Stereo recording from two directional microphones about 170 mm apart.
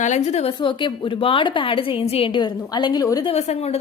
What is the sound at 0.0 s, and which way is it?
Speech, 45° left (ahead or behind).